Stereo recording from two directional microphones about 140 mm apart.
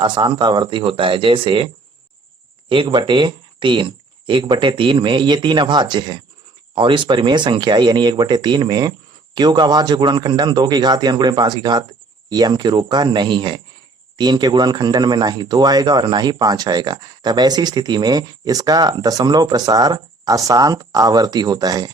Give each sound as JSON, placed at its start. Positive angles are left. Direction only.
{"t": 0.0, "sound": "speech", "side_deg": -35}